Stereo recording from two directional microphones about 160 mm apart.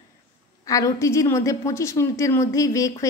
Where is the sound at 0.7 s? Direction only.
20° left (ahead or behind).